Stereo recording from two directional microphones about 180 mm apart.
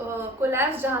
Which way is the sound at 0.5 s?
10° right (ahead or behind).